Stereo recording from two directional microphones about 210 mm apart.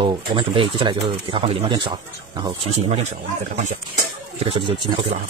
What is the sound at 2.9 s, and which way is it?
Speech, 30° right (ahead or behind).